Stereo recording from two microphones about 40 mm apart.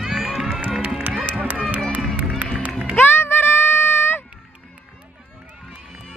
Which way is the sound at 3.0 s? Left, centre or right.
Left.